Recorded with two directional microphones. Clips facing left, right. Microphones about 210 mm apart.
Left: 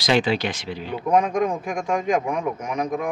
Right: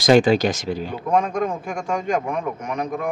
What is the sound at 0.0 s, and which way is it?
Speech, 45° right (ahead or behind).